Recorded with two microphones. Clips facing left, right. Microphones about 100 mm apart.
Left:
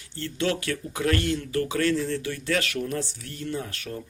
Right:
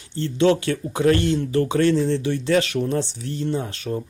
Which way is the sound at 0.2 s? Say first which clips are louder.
Right 9 dB; 25° right (ahead or behind).